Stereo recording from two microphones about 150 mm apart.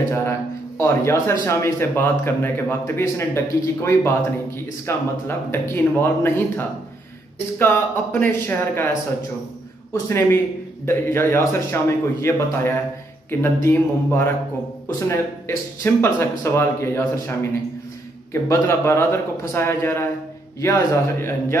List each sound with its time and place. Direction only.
0.7 s speech: 20° left (ahead or behind)
10.0 s speech: 15° left (ahead or behind)